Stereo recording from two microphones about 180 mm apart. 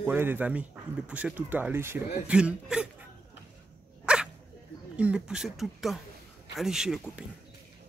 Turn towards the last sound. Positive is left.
turn(degrees=-5)  # may be behind; listen again after turning